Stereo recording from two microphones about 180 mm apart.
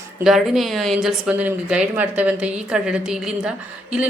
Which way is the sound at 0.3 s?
Centre (ahead or behind).